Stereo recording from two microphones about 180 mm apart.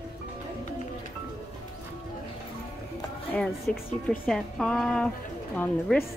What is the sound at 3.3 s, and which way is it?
Speech, 5° left (ahead or behind).